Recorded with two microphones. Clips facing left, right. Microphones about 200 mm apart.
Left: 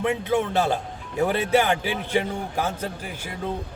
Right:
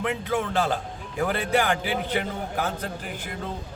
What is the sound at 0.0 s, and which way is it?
A man's voice, 25° left (ahead or behind).